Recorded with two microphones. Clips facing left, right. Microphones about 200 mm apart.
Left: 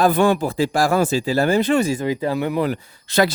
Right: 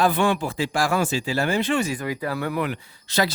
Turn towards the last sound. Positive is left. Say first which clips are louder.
# left 5 dB
turn(degrees=55)  # may be behind; listen again after turning